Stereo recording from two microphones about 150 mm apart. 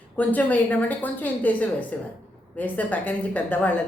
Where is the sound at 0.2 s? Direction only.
10° left (ahead or behind).